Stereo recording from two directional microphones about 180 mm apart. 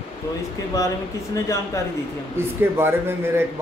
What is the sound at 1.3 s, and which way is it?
Speech, 15° left (ahead or behind).